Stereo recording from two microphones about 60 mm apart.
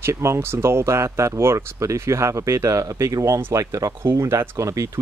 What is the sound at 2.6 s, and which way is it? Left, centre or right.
Speech, right.